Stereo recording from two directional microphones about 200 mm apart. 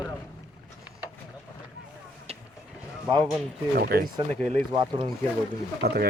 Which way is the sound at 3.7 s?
50° right (ahead or behind).